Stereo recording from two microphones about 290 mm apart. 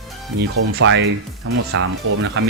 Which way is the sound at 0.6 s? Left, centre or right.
Right.